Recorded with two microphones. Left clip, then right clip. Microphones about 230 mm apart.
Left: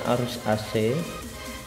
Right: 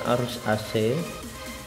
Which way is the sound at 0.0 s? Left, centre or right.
Centre.